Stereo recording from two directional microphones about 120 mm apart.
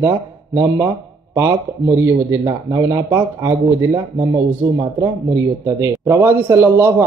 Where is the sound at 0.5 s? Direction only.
35° right (ahead or behind).